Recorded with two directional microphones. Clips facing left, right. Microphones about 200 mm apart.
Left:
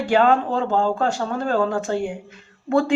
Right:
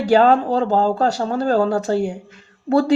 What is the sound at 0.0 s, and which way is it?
Speech, 40° right (ahead or behind).